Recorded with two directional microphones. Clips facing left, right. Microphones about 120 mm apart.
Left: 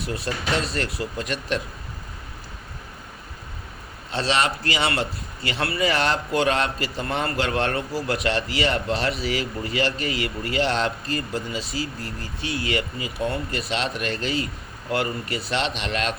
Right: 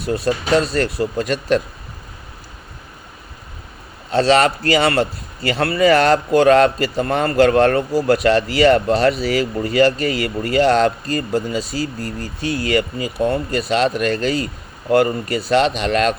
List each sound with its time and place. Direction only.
0.5 s a man's voice: 40° right (ahead or behind)
4.1 s a man's voice: 45° right (ahead or behind)